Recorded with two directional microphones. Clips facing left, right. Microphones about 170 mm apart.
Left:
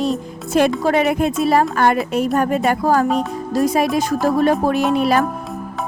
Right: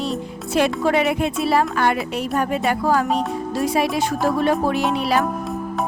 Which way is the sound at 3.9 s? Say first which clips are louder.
Left 3 dB; 40° left (ahead or behind).